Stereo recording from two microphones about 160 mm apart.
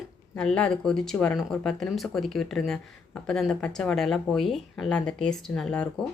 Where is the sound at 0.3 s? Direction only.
5° left (ahead or behind).